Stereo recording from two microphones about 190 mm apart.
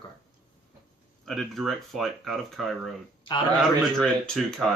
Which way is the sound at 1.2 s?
Centre (ahead or behind).